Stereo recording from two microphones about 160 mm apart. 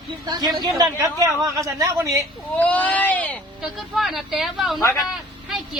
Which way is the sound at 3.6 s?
Centre (ahead or behind).